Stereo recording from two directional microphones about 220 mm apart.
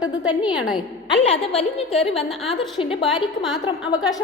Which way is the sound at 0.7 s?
25° left (ahead or behind).